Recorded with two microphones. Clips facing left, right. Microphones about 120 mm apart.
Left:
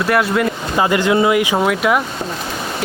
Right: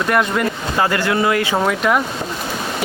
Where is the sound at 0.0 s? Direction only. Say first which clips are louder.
Left 2 dB; 5° left (ahead or behind).